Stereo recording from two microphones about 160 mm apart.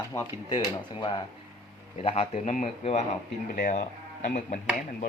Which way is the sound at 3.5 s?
55° left (ahead or behind).